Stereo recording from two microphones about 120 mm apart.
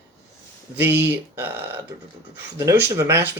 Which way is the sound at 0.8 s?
15° right (ahead or behind).